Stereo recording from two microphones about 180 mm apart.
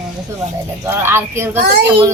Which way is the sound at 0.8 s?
15° right (ahead or behind).